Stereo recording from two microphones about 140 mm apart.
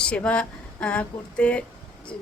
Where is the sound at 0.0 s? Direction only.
10° left (ahead or behind).